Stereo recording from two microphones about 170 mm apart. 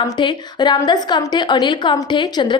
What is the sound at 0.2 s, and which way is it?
A woman's voice, 25° left (ahead or behind).